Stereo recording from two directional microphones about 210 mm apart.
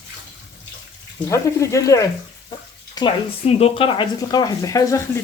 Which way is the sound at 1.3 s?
15° left (ahead or behind).